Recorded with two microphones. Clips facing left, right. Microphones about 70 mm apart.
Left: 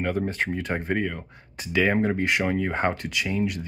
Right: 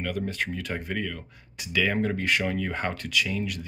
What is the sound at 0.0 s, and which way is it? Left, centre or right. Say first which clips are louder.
Speech: left 4 dB; left.